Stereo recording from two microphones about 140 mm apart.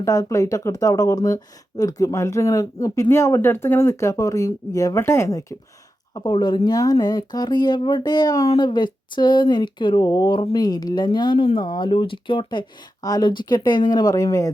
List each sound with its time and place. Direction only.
0.0 s speech: 25° left (ahead or behind)